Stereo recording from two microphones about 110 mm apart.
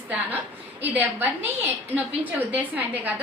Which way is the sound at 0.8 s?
15° right (ahead or behind).